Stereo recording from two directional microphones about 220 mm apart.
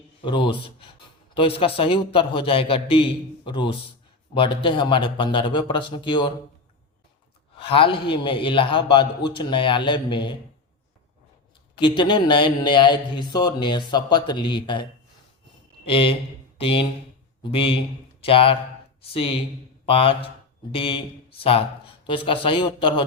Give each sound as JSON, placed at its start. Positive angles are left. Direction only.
{"t": 0.2, "sound": "a man's voice", "side_deg": 20}
{"t": 7.6, "sound": "a man's voice", "side_deg": 25}
{"t": 11.7, "sound": "a man's voice", "side_deg": 20}
{"t": 15.9, "sound": "a man's voice", "side_deg": 25}